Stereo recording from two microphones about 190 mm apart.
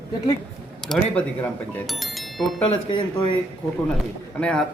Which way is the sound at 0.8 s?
5° left (ahead or behind).